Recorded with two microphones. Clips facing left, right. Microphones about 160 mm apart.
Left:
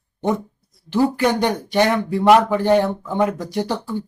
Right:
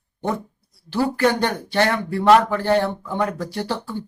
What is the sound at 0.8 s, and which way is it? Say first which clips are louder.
Speech: left 2 dB; 15° left (ahead or behind).